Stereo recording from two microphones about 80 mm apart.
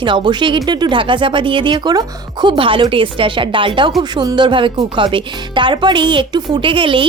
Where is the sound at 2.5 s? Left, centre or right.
Right.